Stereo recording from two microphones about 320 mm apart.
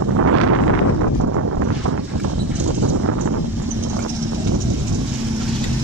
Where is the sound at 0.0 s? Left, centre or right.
Right.